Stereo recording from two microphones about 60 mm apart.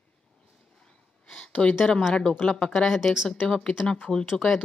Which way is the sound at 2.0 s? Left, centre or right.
Centre.